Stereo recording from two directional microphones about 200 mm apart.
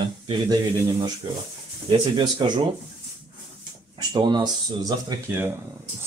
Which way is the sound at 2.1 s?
25° right (ahead or behind).